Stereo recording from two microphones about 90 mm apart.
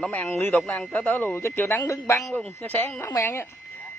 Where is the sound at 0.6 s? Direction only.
5° left (ahead or behind).